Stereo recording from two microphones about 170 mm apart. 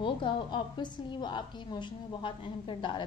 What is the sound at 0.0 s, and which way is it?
A woman's voice, 30° left (ahead or behind).